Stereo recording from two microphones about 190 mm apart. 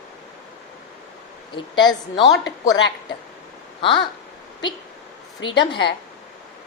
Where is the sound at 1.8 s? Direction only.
20° left (ahead or behind).